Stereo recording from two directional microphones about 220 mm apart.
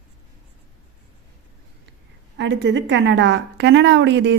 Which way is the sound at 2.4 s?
55° right (ahead or behind).